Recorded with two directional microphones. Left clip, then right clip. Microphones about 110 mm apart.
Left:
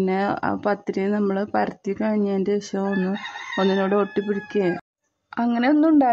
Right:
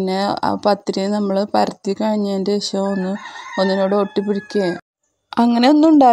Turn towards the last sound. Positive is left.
turn(degrees=-55)  # may be behind; listen again after turning